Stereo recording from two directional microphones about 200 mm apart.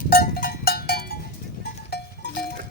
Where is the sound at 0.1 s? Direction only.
50° left (ahead or behind).